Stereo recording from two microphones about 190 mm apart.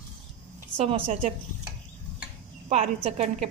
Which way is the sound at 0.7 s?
30° right (ahead or behind).